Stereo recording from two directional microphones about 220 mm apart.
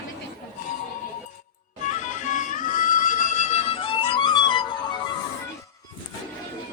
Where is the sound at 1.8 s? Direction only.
35° left (ahead or behind).